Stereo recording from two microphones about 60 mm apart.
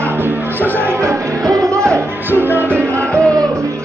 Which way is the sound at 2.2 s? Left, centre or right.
Right.